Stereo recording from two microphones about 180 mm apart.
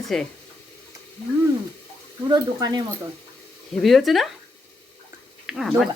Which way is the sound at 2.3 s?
25° right (ahead or behind).